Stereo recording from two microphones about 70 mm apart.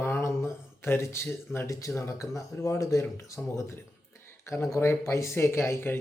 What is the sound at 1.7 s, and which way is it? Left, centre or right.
Speech, left.